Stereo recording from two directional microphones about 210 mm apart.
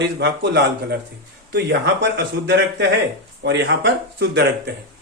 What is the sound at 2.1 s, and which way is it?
Speech, 55° right (ahead or behind).